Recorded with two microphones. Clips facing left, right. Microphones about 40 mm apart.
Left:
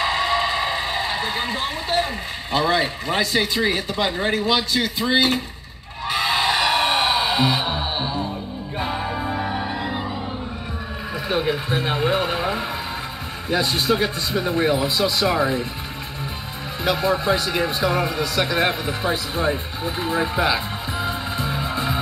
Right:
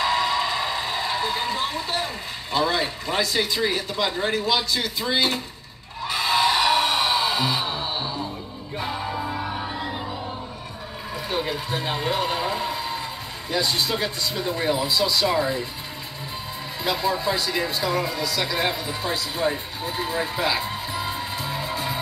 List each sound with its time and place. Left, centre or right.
0.0 s a sound: left
2.5 s speech: left
6.0 s a sound: left
6.8 s music: left
9.8 s music: centre
11.2 s speech: left
16.8 s speech: left